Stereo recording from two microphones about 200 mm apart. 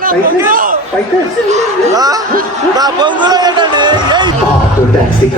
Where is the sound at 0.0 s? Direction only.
45° right (ahead or behind).